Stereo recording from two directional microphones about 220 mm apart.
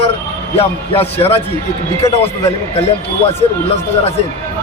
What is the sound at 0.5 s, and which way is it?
Speech, 25° left (ahead or behind).